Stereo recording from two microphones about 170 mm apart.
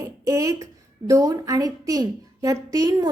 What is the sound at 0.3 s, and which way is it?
A woman's voice, 20° right (ahead or behind).